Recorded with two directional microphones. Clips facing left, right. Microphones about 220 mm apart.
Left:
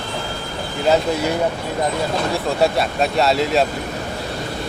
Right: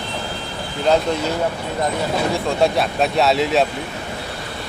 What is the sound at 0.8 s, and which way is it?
Speech, 5° left (ahead or behind).